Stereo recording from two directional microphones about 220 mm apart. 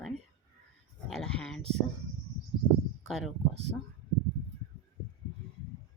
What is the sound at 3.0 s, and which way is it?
Speech, centre (ahead or behind).